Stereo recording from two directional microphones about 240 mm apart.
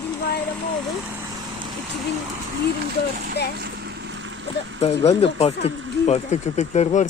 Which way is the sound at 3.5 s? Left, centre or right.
Right.